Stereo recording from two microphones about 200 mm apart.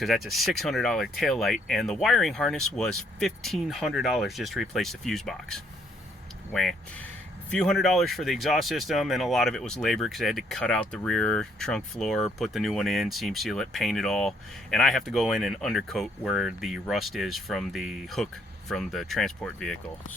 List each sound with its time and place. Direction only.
0.0 s speech: centre (ahead or behind)